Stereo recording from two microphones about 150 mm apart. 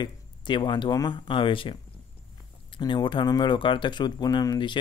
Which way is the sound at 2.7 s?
30° left (ahead or behind).